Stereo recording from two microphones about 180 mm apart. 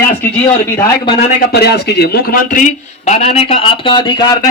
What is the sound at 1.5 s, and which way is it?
A man's voice, 65° left (ahead or behind).